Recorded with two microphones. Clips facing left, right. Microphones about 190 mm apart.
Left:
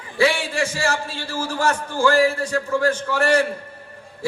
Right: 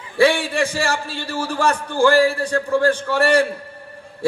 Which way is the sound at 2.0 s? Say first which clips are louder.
Right 3 dB; 30° right (ahead or behind).